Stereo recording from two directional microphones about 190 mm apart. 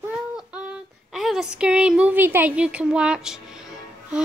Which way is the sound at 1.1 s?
Centre (ahead or behind).